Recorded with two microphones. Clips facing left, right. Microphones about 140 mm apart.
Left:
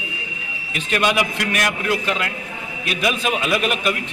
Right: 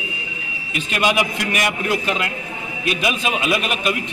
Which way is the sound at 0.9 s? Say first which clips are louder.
Even; 10° right (ahead or behind).